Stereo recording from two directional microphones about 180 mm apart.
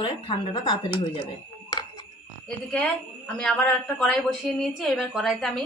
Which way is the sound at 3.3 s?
5° left (ahead or behind).